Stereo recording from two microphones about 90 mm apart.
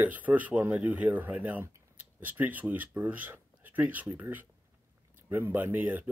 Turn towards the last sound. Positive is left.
turn(degrees=-20)  # may be behind; listen again after turning